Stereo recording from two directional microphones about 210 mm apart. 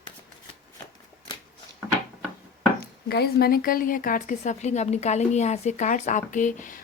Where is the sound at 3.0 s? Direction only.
50° left (ahead or behind).